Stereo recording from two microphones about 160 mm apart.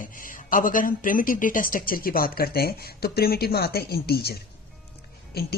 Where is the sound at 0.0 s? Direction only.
55° left (ahead or behind).